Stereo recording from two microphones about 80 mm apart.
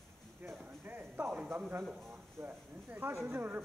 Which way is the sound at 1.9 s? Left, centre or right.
Right.